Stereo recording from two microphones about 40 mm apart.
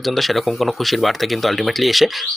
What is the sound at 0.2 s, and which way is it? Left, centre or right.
Speech, centre.